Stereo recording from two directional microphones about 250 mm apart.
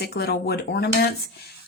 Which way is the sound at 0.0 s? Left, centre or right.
Left.